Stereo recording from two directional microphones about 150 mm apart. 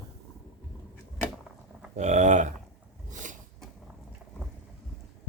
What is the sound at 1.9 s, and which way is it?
Speech, 50° right (ahead or behind).